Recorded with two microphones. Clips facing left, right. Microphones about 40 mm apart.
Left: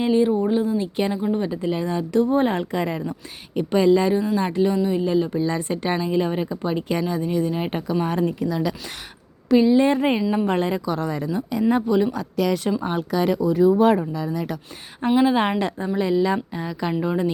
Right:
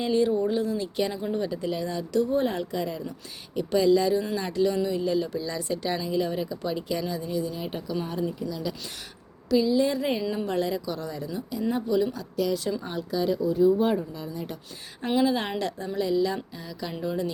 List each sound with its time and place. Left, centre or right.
0.0 s a woman's voice: left
9.5 s a woman's voice: left
12.1 s speech: left
12.8 s speech: left
15.0 s speech: left